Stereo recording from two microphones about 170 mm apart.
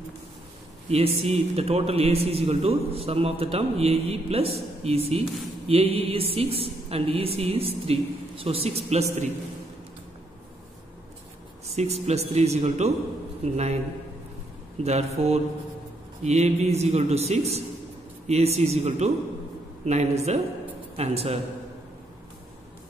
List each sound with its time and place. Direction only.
0.8 s a man's voice: 35° right (ahead or behind)
11.7 s a man's voice: 40° right (ahead or behind)
14.8 s a man's voice: 40° right (ahead or behind)